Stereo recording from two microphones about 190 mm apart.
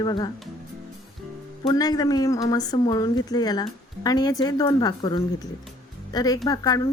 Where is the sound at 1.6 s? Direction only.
20° left (ahead or behind).